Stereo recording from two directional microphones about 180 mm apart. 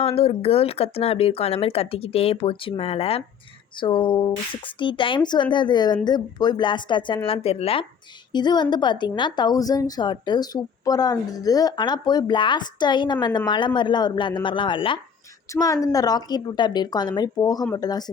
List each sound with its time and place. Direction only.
0.0 s a woman's voice: 35° left (ahead or behind)